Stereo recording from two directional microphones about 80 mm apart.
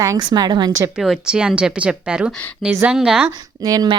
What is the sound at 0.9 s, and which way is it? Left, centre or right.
Speech, centre.